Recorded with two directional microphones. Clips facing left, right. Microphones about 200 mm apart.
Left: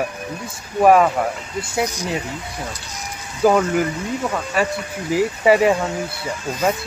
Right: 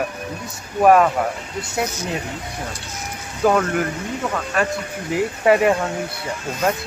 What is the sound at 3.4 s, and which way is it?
Speech, 5° left (ahead or behind).